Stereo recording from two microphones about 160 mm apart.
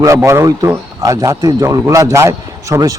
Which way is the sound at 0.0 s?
20° right (ahead or behind).